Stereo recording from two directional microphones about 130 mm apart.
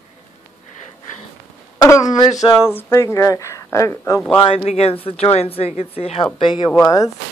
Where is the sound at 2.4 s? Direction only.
25° left (ahead or behind).